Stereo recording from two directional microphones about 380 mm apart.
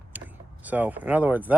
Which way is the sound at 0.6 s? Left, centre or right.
Centre.